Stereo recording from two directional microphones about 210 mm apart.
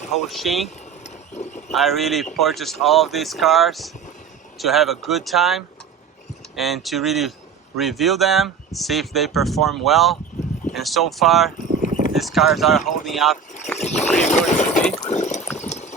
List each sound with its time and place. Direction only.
0.1 s speech: centre (ahead or behind)
1.0 s horse: 35° left (ahead or behind)
1.7 s speech: centre (ahead or behind)
13.7 s speech: 30° left (ahead or behind)
14.9 s a sound: 35° left (ahead or behind)
15.5 s clip-clop: 35° left (ahead or behind)